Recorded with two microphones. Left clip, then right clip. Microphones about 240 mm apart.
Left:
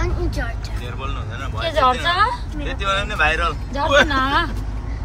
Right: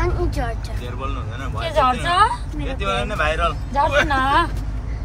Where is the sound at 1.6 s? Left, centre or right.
Right.